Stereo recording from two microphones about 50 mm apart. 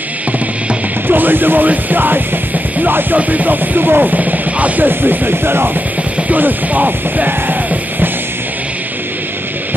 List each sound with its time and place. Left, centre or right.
1.0 s music: right
6.2 s music: right